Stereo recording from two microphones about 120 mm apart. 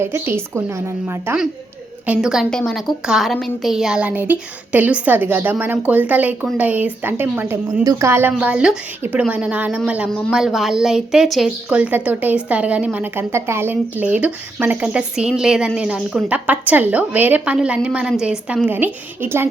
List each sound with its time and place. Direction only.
0.0 s a woman's voice: 20° right (ahead or behind)
2.0 s a woman's voice: 5° right (ahead or behind); by 8.3 s 20° right (ahead or behind)
8.3 s a woman's voice: 10° right (ahead or behind)
10.1 s speech: 10° left (ahead or behind)
10.3 s a woman's voice: 5° right (ahead or behind); by 19.5 s 20° right (ahead or behind)